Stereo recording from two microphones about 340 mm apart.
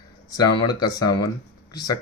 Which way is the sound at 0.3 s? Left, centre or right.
Centre.